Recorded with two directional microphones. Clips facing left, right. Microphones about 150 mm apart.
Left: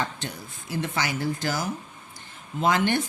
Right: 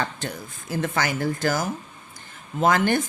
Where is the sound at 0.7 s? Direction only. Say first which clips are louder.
Right 3 dB; 50° right (ahead or behind).